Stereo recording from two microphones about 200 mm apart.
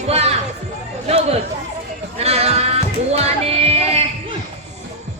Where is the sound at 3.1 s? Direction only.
30° right (ahead or behind).